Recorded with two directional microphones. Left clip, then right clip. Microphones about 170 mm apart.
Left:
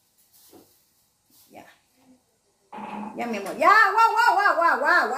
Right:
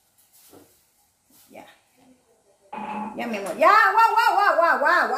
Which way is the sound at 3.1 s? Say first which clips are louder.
Right 2 dB; 15° left (ahead or behind).